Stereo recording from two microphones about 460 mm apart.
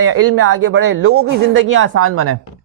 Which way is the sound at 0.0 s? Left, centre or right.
Right.